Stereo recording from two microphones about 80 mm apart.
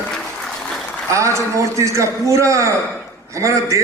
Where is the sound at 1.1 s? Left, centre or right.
Right.